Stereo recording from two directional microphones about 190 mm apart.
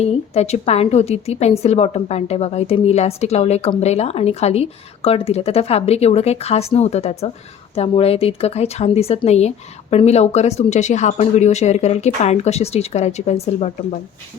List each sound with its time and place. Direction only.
0.0 s a woman's voice: 35° left (ahead or behind)